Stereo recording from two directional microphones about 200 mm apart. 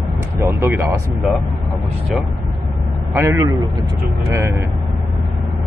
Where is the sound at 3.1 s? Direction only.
15° right (ahead or behind).